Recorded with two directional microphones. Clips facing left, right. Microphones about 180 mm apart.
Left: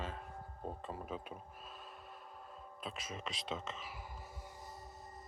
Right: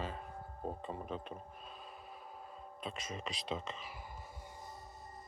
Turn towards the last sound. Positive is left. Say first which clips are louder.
# right 2 dB
turn(degrees=0)  # may be behind; listen again after turning